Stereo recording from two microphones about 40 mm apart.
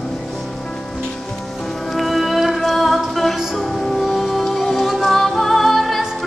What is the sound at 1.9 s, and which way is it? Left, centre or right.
Music, centre.